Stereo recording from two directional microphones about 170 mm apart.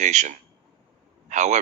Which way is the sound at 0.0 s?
45° right (ahead or behind).